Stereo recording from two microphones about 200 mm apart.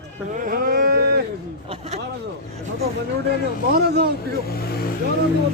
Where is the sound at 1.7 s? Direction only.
30° right (ahead or behind).